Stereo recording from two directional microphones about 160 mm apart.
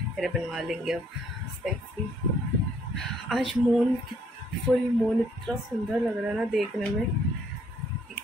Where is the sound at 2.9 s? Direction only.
Centre (ahead or behind).